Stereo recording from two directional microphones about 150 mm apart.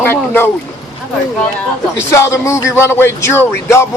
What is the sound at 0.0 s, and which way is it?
Speech, 15° left (ahead or behind).